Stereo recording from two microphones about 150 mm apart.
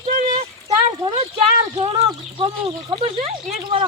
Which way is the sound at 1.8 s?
40° right (ahead or behind).